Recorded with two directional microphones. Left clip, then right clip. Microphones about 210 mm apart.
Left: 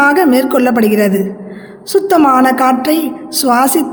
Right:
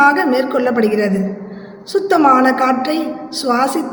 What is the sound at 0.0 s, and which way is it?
A woman's voice, 60° left (ahead or behind).